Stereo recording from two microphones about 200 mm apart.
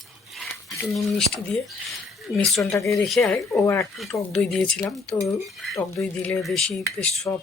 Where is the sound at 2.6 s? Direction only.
15° left (ahead or behind).